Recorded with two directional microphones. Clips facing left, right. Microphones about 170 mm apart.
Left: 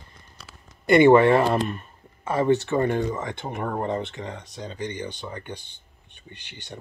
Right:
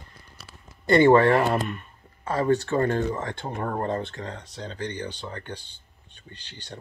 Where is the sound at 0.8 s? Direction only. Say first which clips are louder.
Left 2 dB; 20° left (ahead or behind).